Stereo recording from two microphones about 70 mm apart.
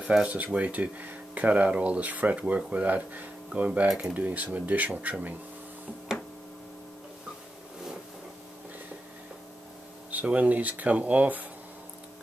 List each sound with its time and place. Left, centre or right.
0.0 s speech: centre
10.1 s speech: right